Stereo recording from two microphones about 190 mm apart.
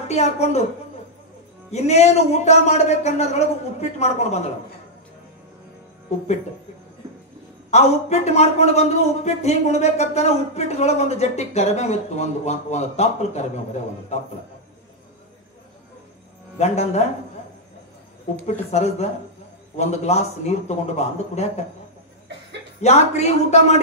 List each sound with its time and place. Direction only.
0.1 s a man's voice: 35° left (ahead or behind)
1.7 s a man's voice: 35° left (ahead or behind)
6.0 s speech: 35° left (ahead or behind)
7.7 s a man's voice: 35° left (ahead or behind)
16.5 s a man's voice: 35° left (ahead or behind)
18.4 s a man's voice: 35° left (ahead or behind)
22.8 s a man's voice: 35° left (ahead or behind)